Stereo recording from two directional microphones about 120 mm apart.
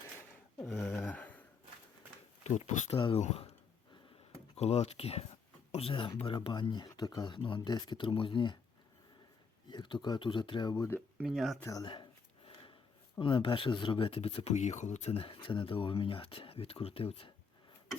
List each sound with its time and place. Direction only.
0.6 s a sound: 5° left (ahead or behind)
1.1 s a sound: 15° left (ahead or behind)
2.4 s speech: 75° left (ahead or behind)
4.5 s speech: 65° left (ahead or behind); by 8.5 s 45° left (ahead or behind)
9.6 s speech: 40° left (ahead or behind)
11.2 s speech: centre (ahead or behind)
11.6 s speech: 30° left (ahead or behind)
13.1 s speech: 45° left (ahead or behind)